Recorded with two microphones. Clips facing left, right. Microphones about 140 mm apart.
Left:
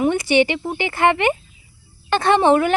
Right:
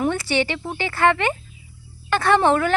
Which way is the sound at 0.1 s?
15° left (ahead or behind).